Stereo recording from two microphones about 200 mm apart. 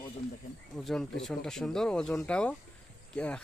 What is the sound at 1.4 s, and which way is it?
Speech, 5° left (ahead or behind).